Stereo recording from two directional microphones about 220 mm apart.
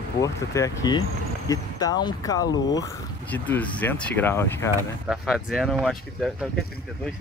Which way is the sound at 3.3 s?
5° left (ahead or behind).